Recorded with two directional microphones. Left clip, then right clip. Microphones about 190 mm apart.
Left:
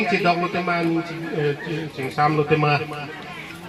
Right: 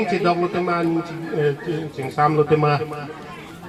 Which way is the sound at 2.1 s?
35° left (ahead or behind).